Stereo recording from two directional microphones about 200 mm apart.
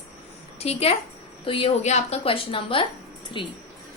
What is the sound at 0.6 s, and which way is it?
A woman's voice, 30° left (ahead or behind).